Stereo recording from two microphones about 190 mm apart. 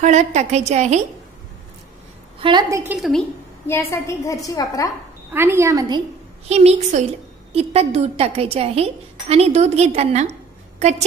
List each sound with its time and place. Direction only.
0.0 s a woman's voice: 35° right (ahead or behind)
2.4 s a woman's voice: 20° right (ahead or behind)
3.6 s a woman's voice: 15° left (ahead or behind)
5.3 s a woman's voice: 10° right (ahead or behind)
6.5 s a woman's voice: 35° right (ahead or behind)